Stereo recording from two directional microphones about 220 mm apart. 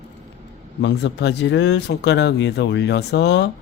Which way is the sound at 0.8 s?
55° left (ahead or behind).